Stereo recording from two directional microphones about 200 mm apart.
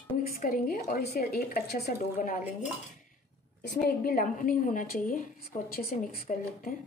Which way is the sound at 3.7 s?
45° left (ahead or behind).